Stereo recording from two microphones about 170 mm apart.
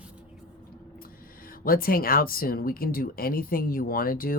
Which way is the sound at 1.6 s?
60° left (ahead or behind).